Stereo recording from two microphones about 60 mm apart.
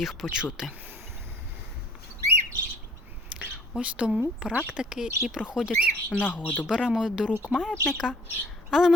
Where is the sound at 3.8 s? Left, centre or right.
Centre.